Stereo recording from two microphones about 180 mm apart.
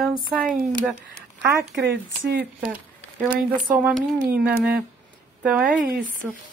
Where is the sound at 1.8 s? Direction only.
70° right (ahead or behind).